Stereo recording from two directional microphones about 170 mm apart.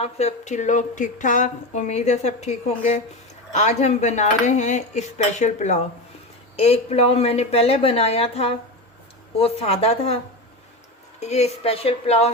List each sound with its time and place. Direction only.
0.0 s a sound: 40° left (ahead or behind)
6.6 s speech: 35° left (ahead or behind)
11.2 s speech: 40° left (ahead or behind)